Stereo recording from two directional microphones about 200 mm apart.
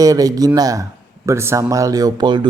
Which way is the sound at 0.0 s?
15° right (ahead or behind).